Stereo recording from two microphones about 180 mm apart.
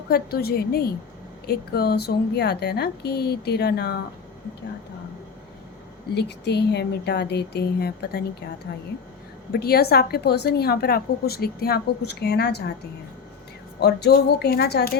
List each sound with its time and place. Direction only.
0.1 s a woman's voice: 60° left (ahead or behind)
6.1 s speech: 65° left (ahead or behind)
9.5 s a woman's voice: 60° left (ahead or behind)
13.7 s a woman's voice: 65° left (ahead or behind)